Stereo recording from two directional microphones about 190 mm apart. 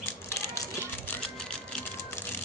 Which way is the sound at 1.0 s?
5° left (ahead or behind).